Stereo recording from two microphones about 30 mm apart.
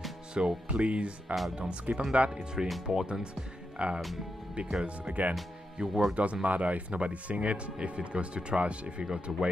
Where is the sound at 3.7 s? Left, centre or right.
Right.